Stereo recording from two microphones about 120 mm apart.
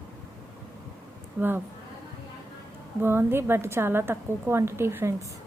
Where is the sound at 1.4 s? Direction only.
15° right (ahead or behind).